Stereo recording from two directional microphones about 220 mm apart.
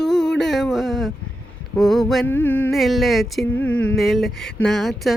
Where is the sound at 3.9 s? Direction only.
Centre (ahead or behind).